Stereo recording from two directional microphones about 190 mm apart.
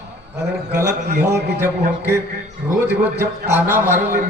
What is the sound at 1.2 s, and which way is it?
Speech, 15° right (ahead or behind).